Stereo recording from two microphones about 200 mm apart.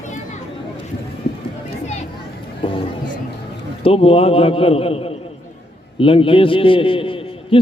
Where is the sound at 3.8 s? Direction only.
30° left (ahead or behind).